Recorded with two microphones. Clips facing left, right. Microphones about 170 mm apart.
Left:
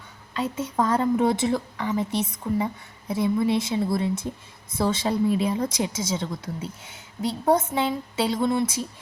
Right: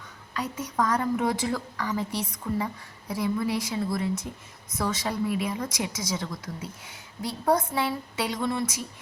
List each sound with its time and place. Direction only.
0.3 s a woman's voice: 25° left (ahead or behind)